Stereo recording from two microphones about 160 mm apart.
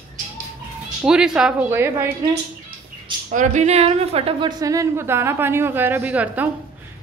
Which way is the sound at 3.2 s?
50° right (ahead or behind).